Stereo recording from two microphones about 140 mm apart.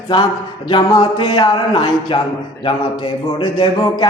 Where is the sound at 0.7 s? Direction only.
30° left (ahead or behind).